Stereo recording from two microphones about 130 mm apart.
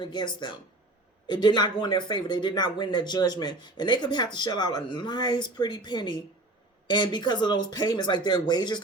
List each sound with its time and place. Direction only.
0.0 s speech: 35° left (ahead or behind)
1.3 s speech: 35° left (ahead or behind)